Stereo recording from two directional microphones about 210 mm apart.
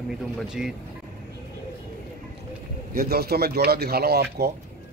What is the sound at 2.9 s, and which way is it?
Speech, 45° right (ahead or behind).